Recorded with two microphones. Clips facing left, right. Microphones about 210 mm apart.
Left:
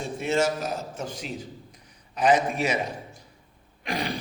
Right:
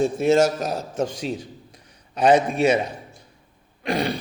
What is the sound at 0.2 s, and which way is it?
Speech, 40° right (ahead or behind).